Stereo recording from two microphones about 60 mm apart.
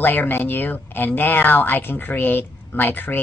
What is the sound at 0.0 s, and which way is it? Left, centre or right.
Speech, left.